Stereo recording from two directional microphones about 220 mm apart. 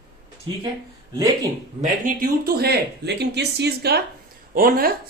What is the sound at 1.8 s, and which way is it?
Speech, 35° right (ahead or behind).